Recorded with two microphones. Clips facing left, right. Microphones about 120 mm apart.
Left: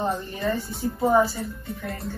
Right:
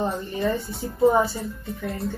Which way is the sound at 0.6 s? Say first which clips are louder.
Right 3 dB; centre (ahead or behind).